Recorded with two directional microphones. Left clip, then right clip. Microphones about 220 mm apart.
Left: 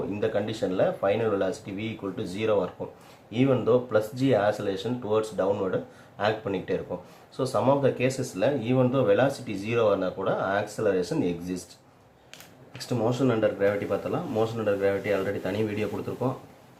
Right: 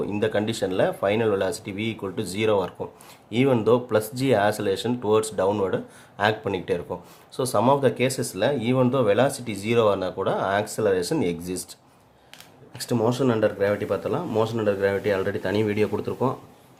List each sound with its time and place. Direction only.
0.2 s speech: 55° right (ahead or behind)
12.9 s speech: 55° right (ahead or behind)